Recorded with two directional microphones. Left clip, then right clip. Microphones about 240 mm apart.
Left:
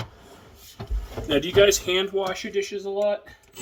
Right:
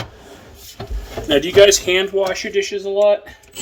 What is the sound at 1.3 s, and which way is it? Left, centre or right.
Speech, centre.